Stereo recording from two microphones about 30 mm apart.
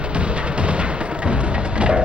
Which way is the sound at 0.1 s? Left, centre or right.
Right.